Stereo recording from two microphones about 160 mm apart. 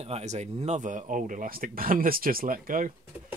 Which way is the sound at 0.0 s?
45° right (ahead or behind).